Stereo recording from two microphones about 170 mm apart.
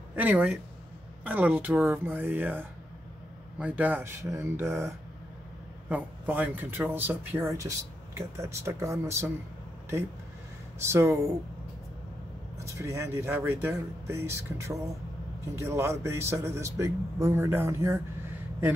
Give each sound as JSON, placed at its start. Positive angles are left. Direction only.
{"t": 0.1, "sound": "a man's voice", "side_deg": -10}
{"t": 10.8, "sound": "a man's voice", "side_deg": -15}
{"t": 12.5, "sound": "a man's voice", "side_deg": -15}